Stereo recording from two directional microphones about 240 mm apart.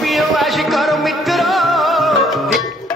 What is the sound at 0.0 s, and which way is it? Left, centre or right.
Music, centre.